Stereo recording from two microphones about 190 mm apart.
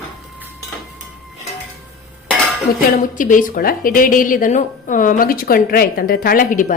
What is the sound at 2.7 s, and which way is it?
A woman's voice, 50° left (ahead or behind).